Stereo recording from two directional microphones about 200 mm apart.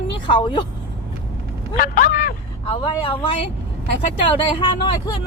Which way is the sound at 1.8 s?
45° left (ahead or behind).